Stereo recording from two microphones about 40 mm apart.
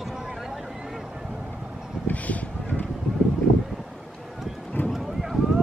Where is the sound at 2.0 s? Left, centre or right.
Left.